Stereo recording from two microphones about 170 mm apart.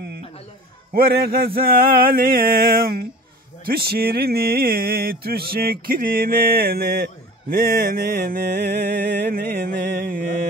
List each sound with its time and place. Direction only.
0.9 s mantra: 65° right (ahead or behind)